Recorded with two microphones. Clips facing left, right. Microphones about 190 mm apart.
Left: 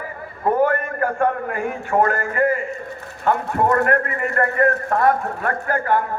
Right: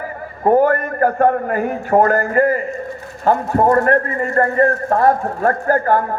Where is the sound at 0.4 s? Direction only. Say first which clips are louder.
Right 5 dB; 45° right (ahead or behind).